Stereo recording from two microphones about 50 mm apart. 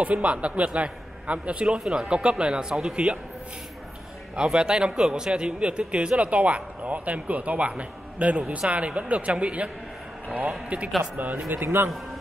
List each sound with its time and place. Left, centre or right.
0.0 s a man's voice: right
2.7 s speech: centre
4.4 s a man's voice: centre
10.7 s a man's voice: right